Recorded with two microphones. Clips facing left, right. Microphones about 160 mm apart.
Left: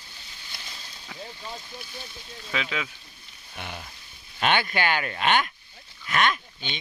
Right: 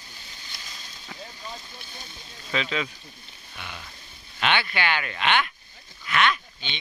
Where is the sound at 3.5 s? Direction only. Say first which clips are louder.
Left 3 dB; 50° left (ahead or behind).